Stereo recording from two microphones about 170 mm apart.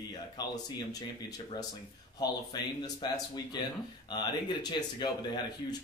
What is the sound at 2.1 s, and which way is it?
Speech, 25° left (ahead or behind).